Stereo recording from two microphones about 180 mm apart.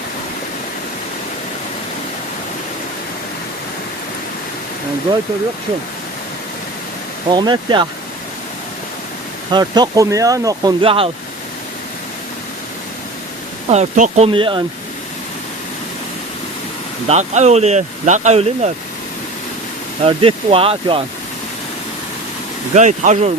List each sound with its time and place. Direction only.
7.3 s speech: 25° right (ahead or behind)
9.5 s speech: 25° right (ahead or behind)
13.7 s speech: 40° right (ahead or behind)
14.3 s speech: 30° right (ahead or behind)
17.1 s speech: 40° right (ahead or behind)
20.1 s speech: 30° right (ahead or behind)
22.7 s speech: 40° right (ahead or behind)